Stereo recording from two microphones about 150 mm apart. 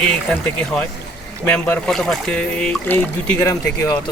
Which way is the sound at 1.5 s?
10° left (ahead or behind).